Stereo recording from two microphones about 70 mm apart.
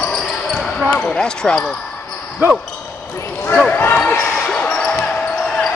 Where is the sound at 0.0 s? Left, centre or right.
Centre.